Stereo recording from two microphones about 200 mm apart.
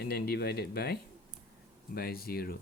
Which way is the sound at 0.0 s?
50° left (ahead or behind).